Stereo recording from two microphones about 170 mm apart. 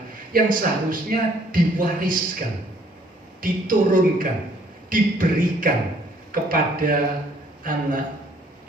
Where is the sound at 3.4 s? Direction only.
55° right (ahead or behind).